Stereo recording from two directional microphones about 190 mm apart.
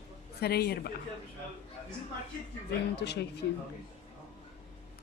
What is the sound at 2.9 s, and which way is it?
Speech, 60° left (ahead or behind).